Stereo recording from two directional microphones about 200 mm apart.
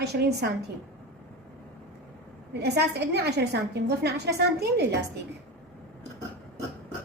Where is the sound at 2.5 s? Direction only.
55° right (ahead or behind).